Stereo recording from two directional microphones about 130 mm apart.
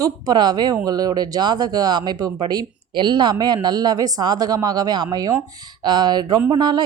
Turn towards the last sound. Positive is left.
turn(degrees=-35)  # may be behind; listen again after turning